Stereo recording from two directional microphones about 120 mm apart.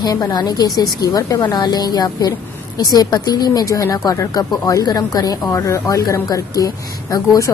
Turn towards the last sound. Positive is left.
turn(degrees=30)  # may be behind; listen again after turning